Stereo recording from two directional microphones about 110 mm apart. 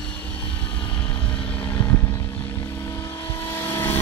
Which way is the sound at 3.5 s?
20° left (ahead or behind).